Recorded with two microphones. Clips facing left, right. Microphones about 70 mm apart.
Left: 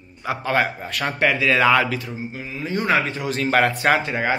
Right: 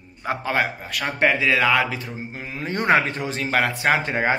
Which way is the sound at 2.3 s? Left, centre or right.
Right.